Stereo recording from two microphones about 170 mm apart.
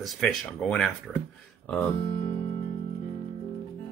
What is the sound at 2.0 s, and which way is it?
Speech, 30° left (ahead or behind).